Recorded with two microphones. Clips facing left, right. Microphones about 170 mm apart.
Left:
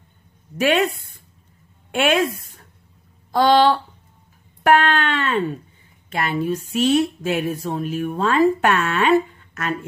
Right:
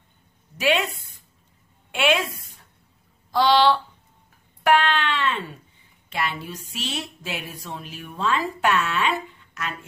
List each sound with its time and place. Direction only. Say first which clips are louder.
0.6 s a woman's voice: left 4 dB; 50° left (ahead or behind)
3.3 s a sound: left 3 dB; 50° left (ahead or behind)
4.6 s speech: left 3 dB; 50° left (ahead or behind)